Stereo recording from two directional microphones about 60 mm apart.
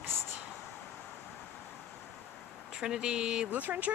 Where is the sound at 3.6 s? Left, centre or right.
Right.